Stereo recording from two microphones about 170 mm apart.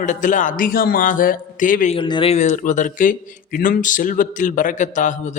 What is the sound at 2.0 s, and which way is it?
Speech, 30° left (ahead or behind).